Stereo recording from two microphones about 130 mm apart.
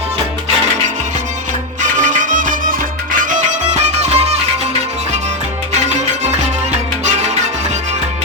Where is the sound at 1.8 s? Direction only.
75° right (ahead or behind).